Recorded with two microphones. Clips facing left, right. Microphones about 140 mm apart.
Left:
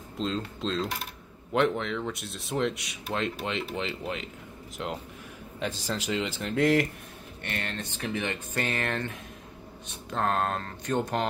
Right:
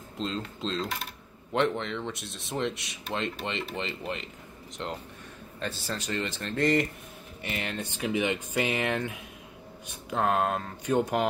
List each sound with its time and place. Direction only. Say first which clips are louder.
0.2 s speech: left 2 dB; centre (ahead or behind)
7.4 s speech: right 1 dB; 10° right (ahead or behind)